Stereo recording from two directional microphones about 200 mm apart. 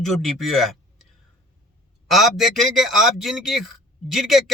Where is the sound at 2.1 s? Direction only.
Centre (ahead or behind).